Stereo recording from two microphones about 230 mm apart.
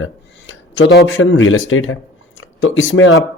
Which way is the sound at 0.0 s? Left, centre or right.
Left.